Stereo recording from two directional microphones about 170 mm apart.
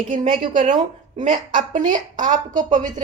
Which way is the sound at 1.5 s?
50° right (ahead or behind).